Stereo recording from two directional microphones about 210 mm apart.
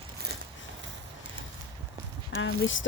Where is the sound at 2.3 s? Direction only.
65° left (ahead or behind).